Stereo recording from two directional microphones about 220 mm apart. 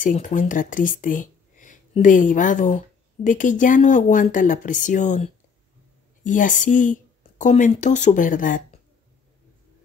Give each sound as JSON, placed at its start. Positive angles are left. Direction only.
{"t": 0.0, "sound": "speech", "side_deg": 35}